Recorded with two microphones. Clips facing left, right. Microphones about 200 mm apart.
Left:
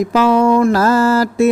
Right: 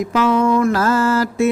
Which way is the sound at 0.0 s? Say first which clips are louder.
Left 3 dB; 40° left (ahead or behind).